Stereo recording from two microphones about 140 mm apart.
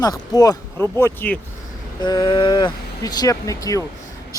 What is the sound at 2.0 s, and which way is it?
Speech, 30° left (ahead or behind).